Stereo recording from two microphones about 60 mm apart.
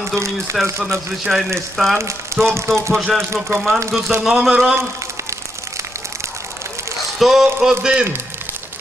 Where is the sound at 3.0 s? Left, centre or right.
Centre.